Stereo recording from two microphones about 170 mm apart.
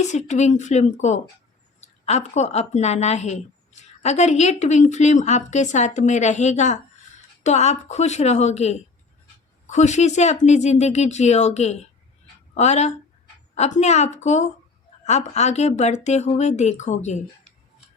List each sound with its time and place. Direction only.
0.0 s a woman's voice: 45° left (ahead or behind)